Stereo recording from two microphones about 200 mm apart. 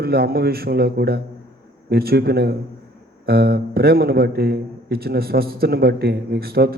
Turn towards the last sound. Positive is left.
turn(degrees=-50)  # may be behind; listen again after turning